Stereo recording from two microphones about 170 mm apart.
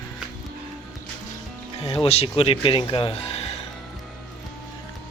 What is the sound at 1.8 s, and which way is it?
Speech, 30° left (ahead or behind).